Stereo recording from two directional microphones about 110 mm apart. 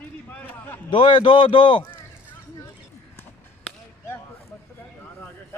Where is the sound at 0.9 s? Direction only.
50° left (ahead or behind).